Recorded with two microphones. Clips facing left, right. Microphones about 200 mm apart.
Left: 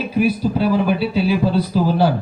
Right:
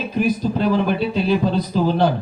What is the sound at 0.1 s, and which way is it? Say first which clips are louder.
A man's voice: left 2 dB; 10° left (ahead or behind).